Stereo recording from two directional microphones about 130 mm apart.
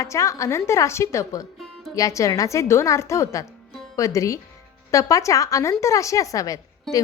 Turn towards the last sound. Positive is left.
turn(degrees=0)  # may be behind; listen again after turning